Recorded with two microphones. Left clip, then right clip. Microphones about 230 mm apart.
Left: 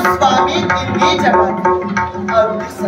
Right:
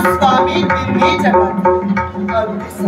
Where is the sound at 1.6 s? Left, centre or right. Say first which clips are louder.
Even; left.